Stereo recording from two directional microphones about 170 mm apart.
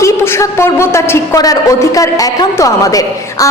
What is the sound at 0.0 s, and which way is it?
A woman's voice, 15° left (ahead or behind).